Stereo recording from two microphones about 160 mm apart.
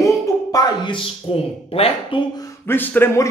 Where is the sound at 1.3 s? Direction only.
35° left (ahead or behind).